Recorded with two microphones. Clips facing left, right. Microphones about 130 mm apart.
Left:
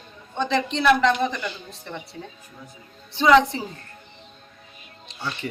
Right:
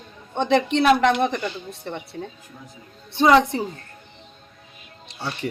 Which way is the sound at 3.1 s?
55° right (ahead or behind).